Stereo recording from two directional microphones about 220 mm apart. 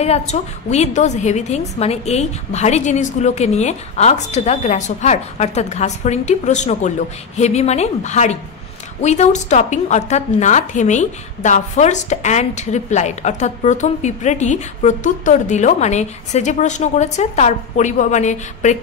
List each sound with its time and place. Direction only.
0.3 s a woman's voice: 30° left (ahead or behind)